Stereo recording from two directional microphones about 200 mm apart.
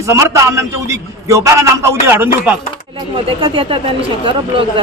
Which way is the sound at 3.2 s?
25° right (ahead or behind).